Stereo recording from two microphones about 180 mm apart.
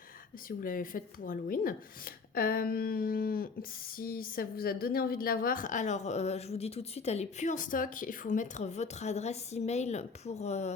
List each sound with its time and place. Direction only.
0.4 s speech: 50° left (ahead or behind)